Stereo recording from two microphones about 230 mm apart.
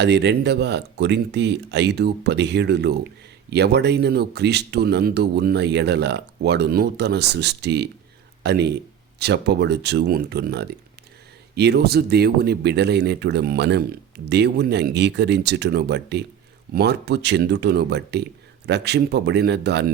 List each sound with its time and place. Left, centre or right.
0.0 s speech: right